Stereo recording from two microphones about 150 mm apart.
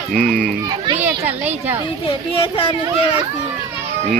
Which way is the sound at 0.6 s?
30° right (ahead or behind).